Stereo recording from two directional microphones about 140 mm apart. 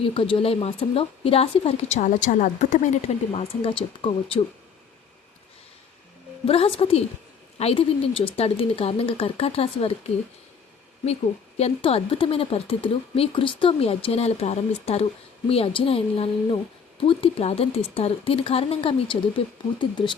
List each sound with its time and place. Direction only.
0.0 s a woman's voice: 40° left (ahead or behind)
6.4 s a woman's voice: 45° left (ahead or behind)
11.0 s a woman's voice: 50° left (ahead or behind)